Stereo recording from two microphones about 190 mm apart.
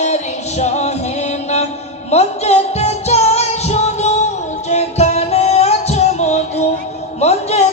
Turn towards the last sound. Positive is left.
turn(degrees=35)  # may be behind; listen again after turning